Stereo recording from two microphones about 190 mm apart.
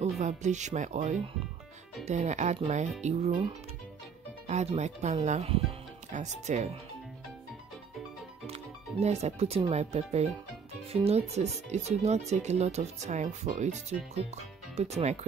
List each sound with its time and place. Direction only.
0.0 s speech: 40° right (ahead or behind)
4.5 s speech: 35° right (ahead or behind)
9.0 s speech: 35° right (ahead or behind)